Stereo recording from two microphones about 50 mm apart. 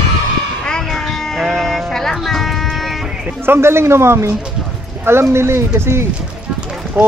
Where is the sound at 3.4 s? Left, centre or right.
Right.